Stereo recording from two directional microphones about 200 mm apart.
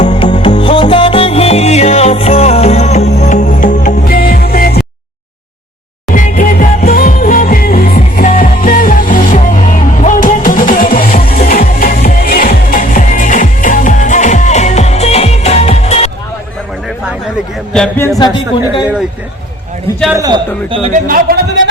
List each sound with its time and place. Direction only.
0.0 s music: 35° left (ahead or behind)
6.1 s music: 40° left (ahead or behind)
17.7 s music: 5° left (ahead or behind)
18.3 s a woman's voice: 25° left (ahead or behind)
20.1 s a man's voice: 20° right (ahead or behind)
20.7 s speech: 30° right (ahead or behind)
21.1 s speech: 45° right (ahead or behind)